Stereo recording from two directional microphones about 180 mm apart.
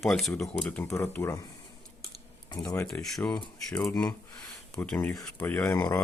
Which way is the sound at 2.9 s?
10° left (ahead or behind).